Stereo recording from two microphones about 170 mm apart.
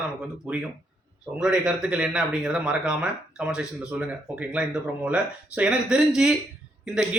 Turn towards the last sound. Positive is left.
turn(degrees=-5)  # may be behind; listen again after turning